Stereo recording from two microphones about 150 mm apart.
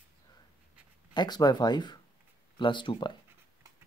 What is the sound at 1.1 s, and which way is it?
Speech, 30° left (ahead or behind).